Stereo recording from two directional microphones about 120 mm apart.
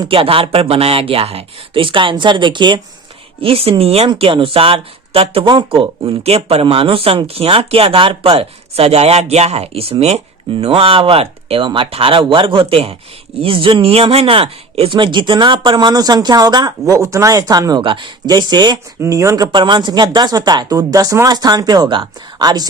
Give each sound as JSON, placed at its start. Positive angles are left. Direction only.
{"t": 0.1, "sound": "speech", "side_deg": -50}
{"t": 3.4, "sound": "a woman's voice", "side_deg": -55}
{"t": 17.8, "sound": "speech", "side_deg": -45}
{"t": 19.5, "sound": "speech", "side_deg": -40}